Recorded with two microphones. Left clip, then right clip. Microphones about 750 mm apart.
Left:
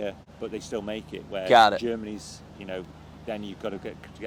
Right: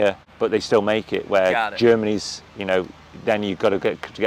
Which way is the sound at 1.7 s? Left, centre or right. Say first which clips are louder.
Right 13 dB; right.